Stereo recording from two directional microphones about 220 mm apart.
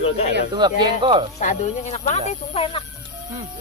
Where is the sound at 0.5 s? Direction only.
20° right (ahead or behind).